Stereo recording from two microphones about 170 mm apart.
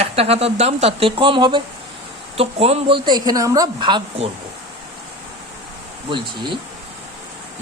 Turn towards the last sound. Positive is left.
turn(degrees=-30)  # may be behind; listen again after turning